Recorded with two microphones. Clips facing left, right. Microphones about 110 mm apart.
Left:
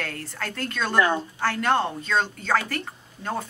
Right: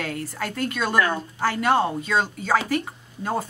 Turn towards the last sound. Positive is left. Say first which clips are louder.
# right 3 dB
turn(degrees=-10)  # may be behind; listen again after turning